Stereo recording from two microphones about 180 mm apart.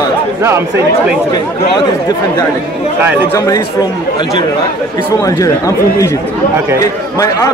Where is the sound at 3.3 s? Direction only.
20° left (ahead or behind).